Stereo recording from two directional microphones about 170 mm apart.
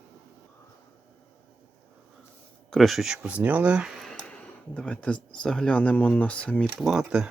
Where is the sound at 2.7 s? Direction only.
Centre (ahead or behind).